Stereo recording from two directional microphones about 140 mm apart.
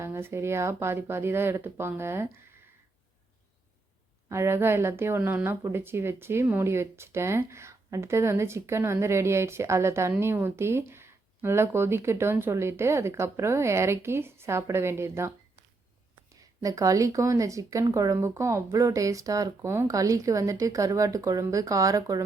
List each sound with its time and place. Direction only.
0.0 s speech: 20° right (ahead or behind)
4.3 s speech: 20° right (ahead or behind)
16.3 s speech: 25° right (ahead or behind)